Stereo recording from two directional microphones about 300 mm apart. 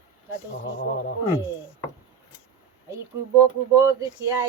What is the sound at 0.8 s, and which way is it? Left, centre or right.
Speech, left.